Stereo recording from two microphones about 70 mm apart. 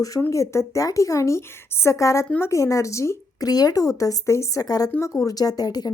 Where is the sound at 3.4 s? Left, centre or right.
Left.